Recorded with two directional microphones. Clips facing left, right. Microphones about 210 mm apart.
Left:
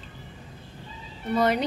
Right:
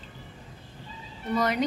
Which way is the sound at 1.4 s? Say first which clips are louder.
Left 3 dB; 25° left (ahead or behind).